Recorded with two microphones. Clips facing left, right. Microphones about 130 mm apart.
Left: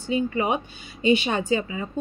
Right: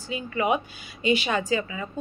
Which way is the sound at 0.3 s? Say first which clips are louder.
Even; 30° left (ahead or behind).